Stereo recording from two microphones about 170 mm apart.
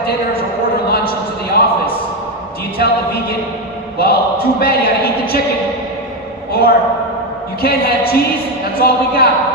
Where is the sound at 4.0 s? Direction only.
65° left (ahead or behind).